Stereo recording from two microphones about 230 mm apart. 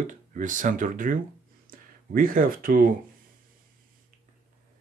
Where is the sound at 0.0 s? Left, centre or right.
Right.